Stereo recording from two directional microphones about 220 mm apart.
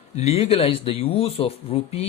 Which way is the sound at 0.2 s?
30° left (ahead or behind).